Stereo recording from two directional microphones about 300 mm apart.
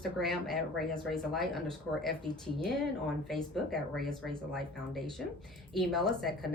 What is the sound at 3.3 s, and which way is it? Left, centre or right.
A woman's voice, centre.